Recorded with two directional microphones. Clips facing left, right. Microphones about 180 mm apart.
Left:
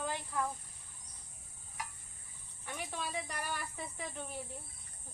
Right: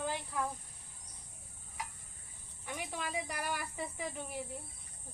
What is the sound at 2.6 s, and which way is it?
Speech, 10° right (ahead or behind).